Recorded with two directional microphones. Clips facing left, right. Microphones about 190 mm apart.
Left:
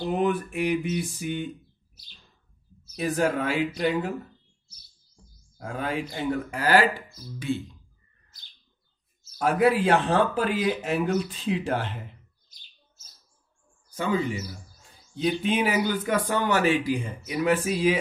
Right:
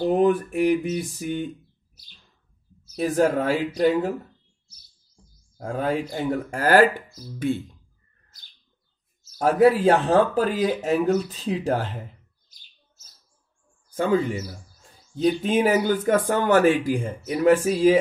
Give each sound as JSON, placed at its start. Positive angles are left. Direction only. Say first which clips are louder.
{"t": 0.0, "sound": "speech", "louder": "right 6 dB", "side_deg": -40}
{"t": 3.0, "sound": "speech", "louder": "right 4 dB", "side_deg": -40}
{"t": 5.6, "sound": "speech", "louder": "right 5 dB", "side_deg": -40}
{"t": 9.4, "sound": "speech", "louder": "right 4 dB", "side_deg": -40}
{"t": 13.9, "sound": "speech", "louder": "right 5 dB", "side_deg": -50}